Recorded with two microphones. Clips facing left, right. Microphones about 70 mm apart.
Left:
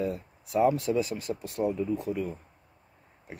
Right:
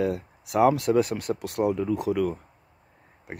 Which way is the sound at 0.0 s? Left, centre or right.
Right.